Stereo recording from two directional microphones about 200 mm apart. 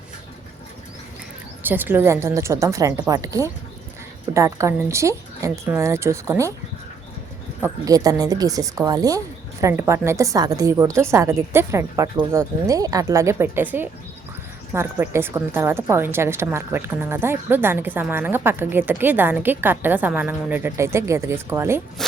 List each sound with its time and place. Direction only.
1.6 s a woman's voice: 10° right (ahead or behind)
7.6 s a woman's voice: 15° right (ahead or behind)